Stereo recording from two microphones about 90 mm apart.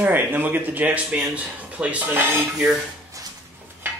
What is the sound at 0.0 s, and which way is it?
Speech, 20° right (ahead or behind).